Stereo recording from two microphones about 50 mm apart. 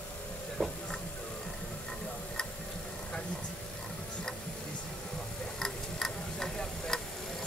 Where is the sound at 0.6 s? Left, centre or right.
Left.